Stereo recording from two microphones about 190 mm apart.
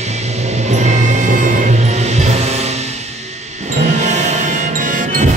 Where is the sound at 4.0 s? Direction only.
35° right (ahead or behind).